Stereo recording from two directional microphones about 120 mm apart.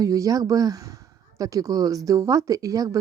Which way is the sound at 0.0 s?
30° right (ahead or behind).